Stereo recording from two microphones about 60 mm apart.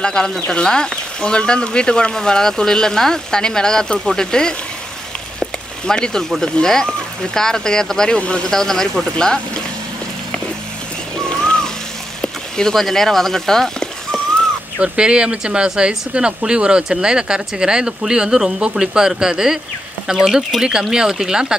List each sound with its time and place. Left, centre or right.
0.0 s speech: centre
5.9 s speech: centre
8.5 s speech: centre
11.2 s a sound: centre
14.8 s speech: centre